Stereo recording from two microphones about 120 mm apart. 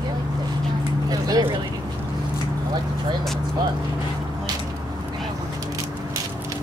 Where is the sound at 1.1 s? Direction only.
35° right (ahead or behind).